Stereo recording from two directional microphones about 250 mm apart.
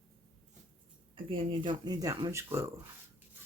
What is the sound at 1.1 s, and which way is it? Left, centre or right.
Speech, centre.